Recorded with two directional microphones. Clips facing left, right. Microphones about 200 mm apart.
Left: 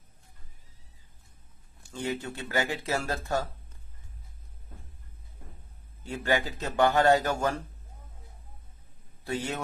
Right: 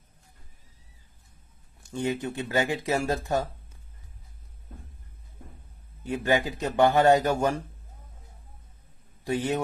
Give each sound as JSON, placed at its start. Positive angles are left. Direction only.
{"t": 1.8, "sound": "speech", "side_deg": -20}
{"t": 6.0, "sound": "speech", "side_deg": -20}
{"t": 9.2, "sound": "a man's voice", "side_deg": -15}